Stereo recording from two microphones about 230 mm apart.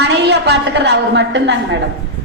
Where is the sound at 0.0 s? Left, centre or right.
Right.